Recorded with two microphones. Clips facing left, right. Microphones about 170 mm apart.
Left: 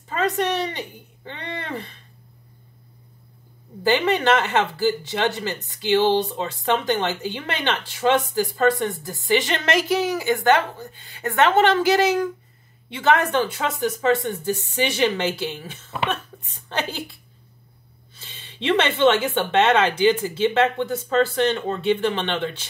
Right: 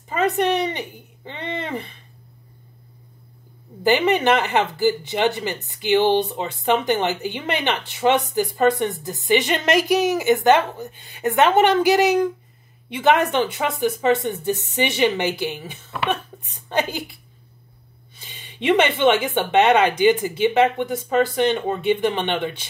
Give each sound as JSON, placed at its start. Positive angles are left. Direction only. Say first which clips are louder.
{"t": 0.1, "sound": "speech", "louder": "right 3 dB", "side_deg": -15}
{"t": 3.8, "sound": "speech", "louder": "right 2 dB", "side_deg": -15}